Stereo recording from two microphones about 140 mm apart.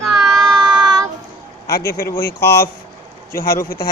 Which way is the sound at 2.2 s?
90° left.